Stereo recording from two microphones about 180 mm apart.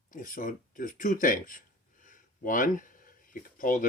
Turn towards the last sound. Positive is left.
turn(degrees=50)  # may be behind; listen again after turning